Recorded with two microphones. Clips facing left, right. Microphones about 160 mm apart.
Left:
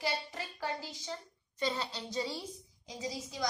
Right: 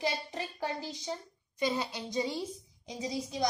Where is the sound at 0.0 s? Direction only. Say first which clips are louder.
Right 3 dB; 20° right (ahead or behind).